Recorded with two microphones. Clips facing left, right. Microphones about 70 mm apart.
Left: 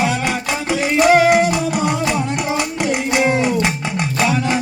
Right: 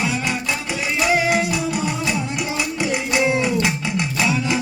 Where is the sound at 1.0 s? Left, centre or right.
Left.